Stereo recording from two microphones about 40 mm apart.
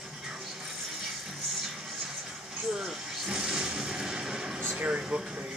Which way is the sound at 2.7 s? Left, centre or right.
Centre.